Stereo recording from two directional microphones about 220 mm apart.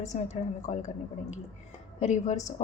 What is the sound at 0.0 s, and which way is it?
Speech, 30° left (ahead or behind).